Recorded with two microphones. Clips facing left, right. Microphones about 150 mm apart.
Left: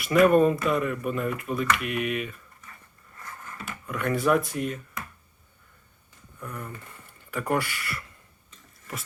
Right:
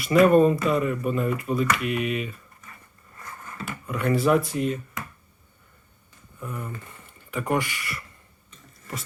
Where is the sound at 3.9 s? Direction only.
5° right (ahead or behind).